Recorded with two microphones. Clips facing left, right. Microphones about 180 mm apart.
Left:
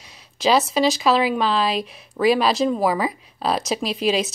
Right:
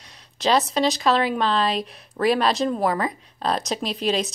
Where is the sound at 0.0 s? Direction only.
5° left (ahead or behind).